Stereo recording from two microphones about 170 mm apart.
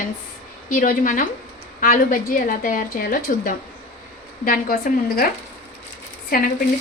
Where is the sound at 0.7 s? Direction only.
50° left (ahead or behind).